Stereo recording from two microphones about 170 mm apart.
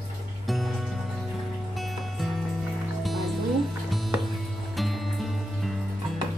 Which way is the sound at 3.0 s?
Centre (ahead or behind).